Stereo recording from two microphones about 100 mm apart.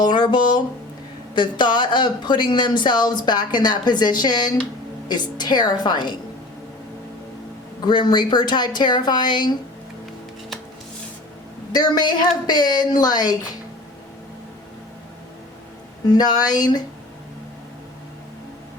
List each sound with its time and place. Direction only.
0.0 s speech: 50° left (ahead or behind)
7.8 s speech: 45° left (ahead or behind)
11.7 s speech: 45° left (ahead or behind)
16.0 s speech: 40° left (ahead or behind)